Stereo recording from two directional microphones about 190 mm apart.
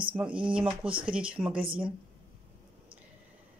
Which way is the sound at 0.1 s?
5° right (ahead or behind).